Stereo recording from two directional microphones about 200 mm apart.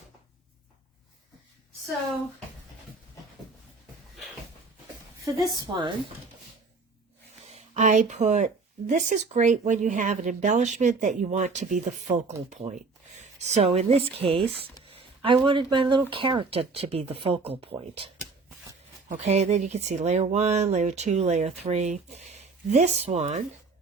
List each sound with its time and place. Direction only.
5.2 s speech: 20° right (ahead or behind)
7.3 s speech: 35° right (ahead or behind)